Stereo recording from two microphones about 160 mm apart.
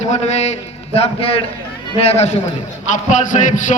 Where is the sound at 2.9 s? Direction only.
50° left (ahead or behind).